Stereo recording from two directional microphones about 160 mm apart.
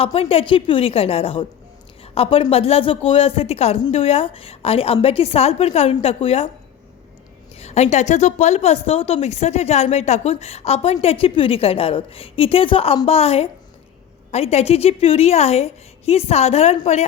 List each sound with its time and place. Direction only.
0.0 s a woman's voice: 40° left (ahead or behind)
7.5 s a woman's voice: 40° left (ahead or behind)